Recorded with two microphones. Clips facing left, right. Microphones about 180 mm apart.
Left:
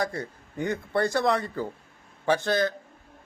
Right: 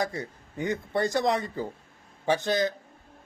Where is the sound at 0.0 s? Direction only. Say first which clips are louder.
Left 1 dB; 20° right (ahead or behind).